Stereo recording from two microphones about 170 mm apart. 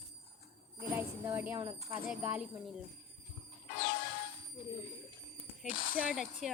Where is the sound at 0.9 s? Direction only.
10° right (ahead or behind).